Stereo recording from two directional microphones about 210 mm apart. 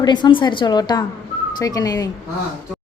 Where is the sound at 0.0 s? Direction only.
20° left (ahead or behind).